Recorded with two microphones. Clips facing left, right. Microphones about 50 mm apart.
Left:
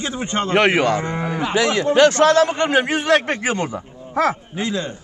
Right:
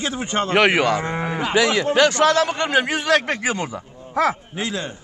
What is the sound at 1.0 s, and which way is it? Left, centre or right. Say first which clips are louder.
A man's voice: left 1 dB; centre.